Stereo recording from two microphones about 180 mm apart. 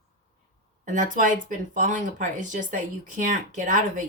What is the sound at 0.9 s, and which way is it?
Speech, 45° right (ahead or behind).